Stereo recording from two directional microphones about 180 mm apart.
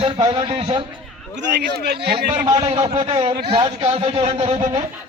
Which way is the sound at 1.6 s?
65° right (ahead or behind).